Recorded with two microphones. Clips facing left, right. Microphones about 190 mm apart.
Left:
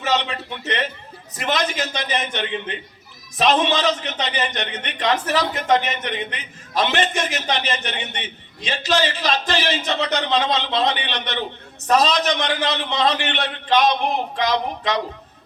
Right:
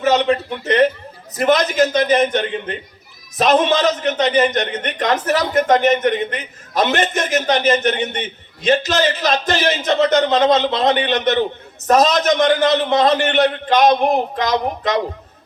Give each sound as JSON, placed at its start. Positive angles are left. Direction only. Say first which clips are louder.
{"t": 0.0, "sound": "a man's voice", "louder": "right 8 dB", "side_deg": -45}